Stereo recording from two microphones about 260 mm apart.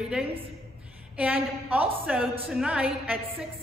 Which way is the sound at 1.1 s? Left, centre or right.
Centre.